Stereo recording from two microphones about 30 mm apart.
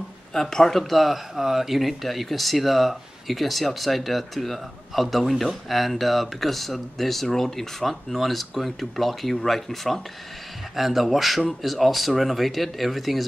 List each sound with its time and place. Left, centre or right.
0.3 s speech: centre
0.7 s speech: centre
10.8 s speech: centre